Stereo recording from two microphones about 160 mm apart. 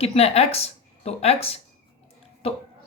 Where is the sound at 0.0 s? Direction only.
40° left (ahead or behind).